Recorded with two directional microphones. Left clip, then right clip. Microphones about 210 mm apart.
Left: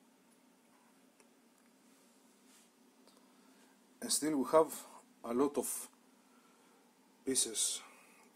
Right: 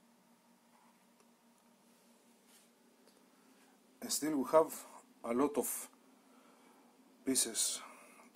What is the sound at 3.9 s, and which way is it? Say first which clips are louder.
Speech: left 2 dB; 10° left (ahead or behind).